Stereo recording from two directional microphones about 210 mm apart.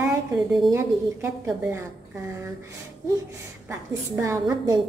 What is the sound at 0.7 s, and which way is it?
A woman's voice, 10° right (ahead or behind).